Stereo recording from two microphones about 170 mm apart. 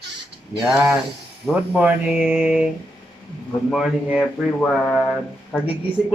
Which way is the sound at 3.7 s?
5° right (ahead or behind).